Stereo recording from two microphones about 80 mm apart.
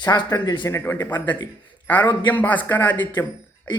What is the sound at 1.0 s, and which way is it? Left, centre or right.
A man's voice, left.